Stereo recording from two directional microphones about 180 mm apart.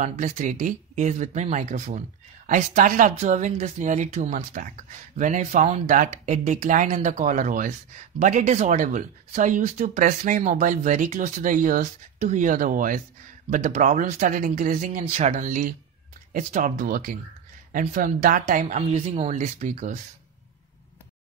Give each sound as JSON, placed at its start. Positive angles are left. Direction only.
{"t": 0.0, "sound": "speech", "side_deg": -40}